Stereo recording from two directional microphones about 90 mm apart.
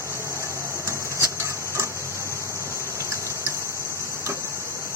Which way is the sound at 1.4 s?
30° left (ahead or behind).